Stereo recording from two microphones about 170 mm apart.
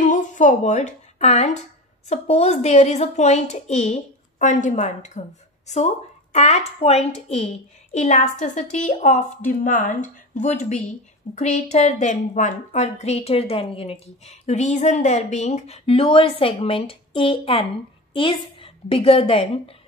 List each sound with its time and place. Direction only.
0.0 s a woman's voice: 50° left (ahead or behind)
6.3 s a woman's voice: 40° left (ahead or behind)